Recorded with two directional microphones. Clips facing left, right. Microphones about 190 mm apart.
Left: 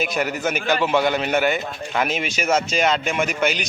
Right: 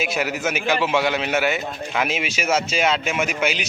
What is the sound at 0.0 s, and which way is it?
A man's voice, 5° right (ahead or behind).